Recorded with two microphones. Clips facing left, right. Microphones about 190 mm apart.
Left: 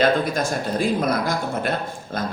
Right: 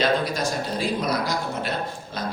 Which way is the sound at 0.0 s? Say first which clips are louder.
Left 3 dB; 50° left (ahead or behind).